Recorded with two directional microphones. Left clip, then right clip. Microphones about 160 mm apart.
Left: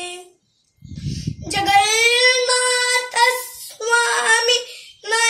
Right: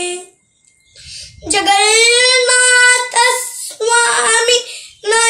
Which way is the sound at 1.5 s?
10° right (ahead or behind).